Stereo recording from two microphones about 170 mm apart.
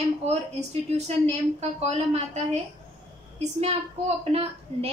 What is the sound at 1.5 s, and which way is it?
A woman's voice, 40° right (ahead or behind).